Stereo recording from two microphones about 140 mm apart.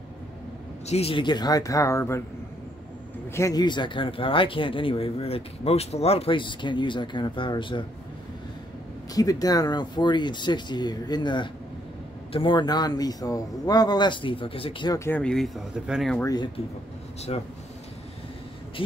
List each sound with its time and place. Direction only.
0.8 s speech: 45° left (ahead or behind); by 2.2 s 20° left (ahead or behind)
3.3 s speech: 25° left (ahead or behind)
9.1 s speech: 25° left (ahead or behind)
15.0 s speech: 10° left (ahead or behind)
17.3 s speech: 45° left (ahead or behind)
18.8 s speech: 40° left (ahead or behind)